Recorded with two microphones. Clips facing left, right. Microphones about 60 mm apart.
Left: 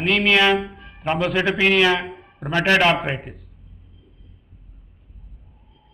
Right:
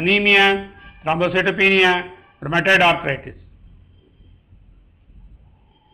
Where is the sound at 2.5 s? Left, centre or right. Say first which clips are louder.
Right 2 dB; centre.